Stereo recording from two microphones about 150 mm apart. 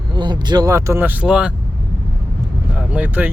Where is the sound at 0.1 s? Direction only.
30° right (ahead or behind); by 1.5 s 5° right (ahead or behind).